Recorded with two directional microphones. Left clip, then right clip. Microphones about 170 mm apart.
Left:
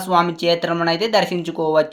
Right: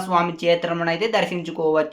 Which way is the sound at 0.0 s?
35° left (ahead or behind).